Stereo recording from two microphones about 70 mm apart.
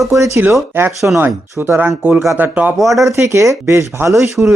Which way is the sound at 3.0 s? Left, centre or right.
Right.